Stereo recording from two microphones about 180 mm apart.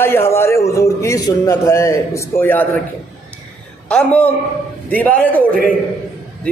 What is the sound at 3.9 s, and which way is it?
A man's voice, 5° left (ahead or behind).